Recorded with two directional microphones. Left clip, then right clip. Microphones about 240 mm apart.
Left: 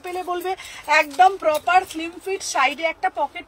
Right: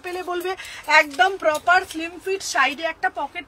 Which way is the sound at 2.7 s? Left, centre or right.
Centre.